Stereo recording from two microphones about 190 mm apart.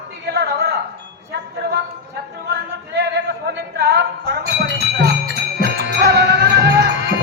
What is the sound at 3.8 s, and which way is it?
Music, 60° right (ahead or behind).